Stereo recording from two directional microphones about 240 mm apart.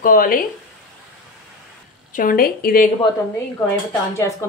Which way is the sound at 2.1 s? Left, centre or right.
Left.